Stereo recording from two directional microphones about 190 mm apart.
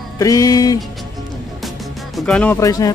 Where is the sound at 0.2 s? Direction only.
20° left (ahead or behind).